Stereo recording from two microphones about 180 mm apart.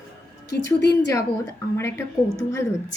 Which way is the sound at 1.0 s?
15° left (ahead or behind).